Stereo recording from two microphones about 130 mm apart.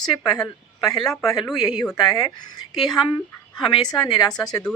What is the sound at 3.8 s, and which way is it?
Speech, 30° left (ahead or behind).